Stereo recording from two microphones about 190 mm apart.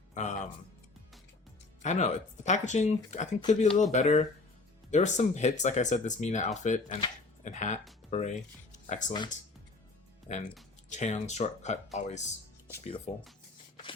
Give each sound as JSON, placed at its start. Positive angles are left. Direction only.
{"t": 0.1, "sound": "music", "side_deg": 40}
{"t": 1.8, "sound": "speech", "side_deg": 40}
{"t": 8.7, "sound": "music", "side_deg": 40}
{"t": 10.8, "sound": "speech", "side_deg": 40}